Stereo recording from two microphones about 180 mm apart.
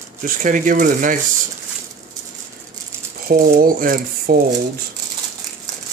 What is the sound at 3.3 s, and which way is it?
Speech, 50° right (ahead or behind).